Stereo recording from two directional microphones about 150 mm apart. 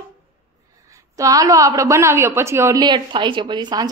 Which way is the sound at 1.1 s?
20° right (ahead or behind).